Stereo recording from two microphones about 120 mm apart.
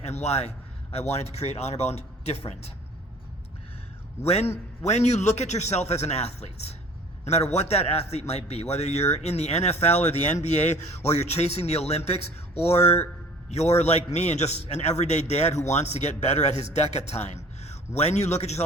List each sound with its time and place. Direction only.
0.0 s speech: 65° left (ahead or behind)
4.3 s a man's voice: 60° left (ahead or behind)